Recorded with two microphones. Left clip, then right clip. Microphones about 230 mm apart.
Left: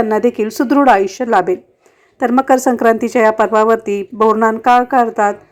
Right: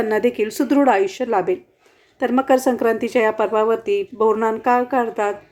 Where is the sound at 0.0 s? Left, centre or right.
Centre.